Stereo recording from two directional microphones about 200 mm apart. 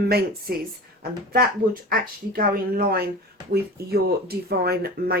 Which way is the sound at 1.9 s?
45° right (ahead or behind).